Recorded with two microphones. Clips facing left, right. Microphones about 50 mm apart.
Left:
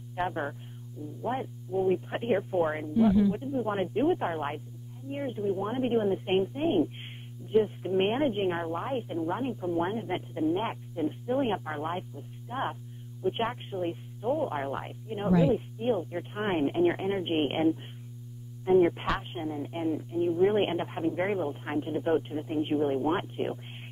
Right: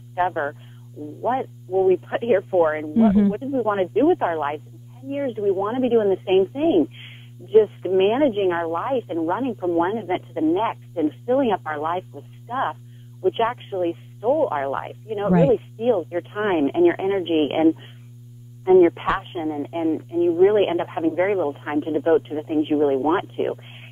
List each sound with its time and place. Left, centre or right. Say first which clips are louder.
0.1 s speech: right 9 dB; right